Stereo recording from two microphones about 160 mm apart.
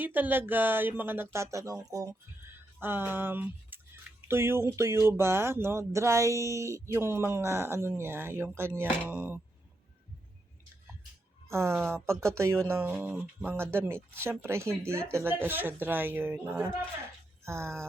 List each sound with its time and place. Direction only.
0.0 s speech: 10° right (ahead or behind)
11.4 s speech: 15° right (ahead or behind)